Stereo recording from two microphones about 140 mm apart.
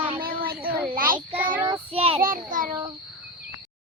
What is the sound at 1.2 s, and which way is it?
Speech, 10° right (ahead or behind).